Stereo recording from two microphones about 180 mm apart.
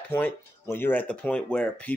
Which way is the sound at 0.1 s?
15° left (ahead or behind).